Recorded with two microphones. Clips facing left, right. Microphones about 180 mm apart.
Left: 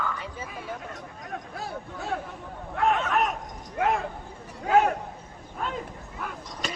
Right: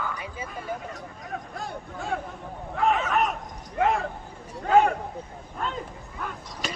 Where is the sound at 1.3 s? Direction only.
5° left (ahead or behind).